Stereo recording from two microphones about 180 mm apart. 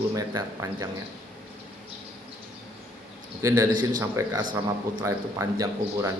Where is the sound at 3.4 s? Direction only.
15° right (ahead or behind).